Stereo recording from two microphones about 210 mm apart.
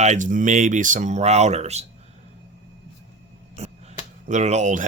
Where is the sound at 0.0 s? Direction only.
35° right (ahead or behind).